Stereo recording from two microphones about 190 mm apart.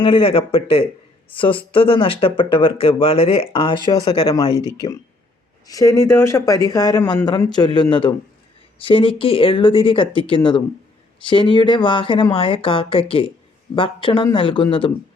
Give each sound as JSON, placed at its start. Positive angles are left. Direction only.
{"t": 0.0, "sound": "speech", "side_deg": 30}
{"t": 5.6, "sound": "speech", "side_deg": 15}